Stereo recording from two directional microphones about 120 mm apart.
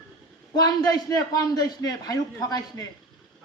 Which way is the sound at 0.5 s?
30° left (ahead or behind).